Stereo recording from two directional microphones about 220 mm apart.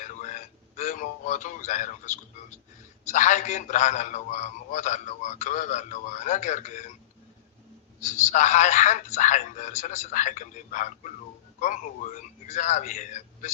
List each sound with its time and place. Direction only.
0.0 s a sound: 35° left (ahead or behind)
3.1 s a man's voice: 35° left (ahead or behind)
8.0 s a man's voice: 35° left (ahead or behind)
12.5 s a man's voice: 35° left (ahead or behind)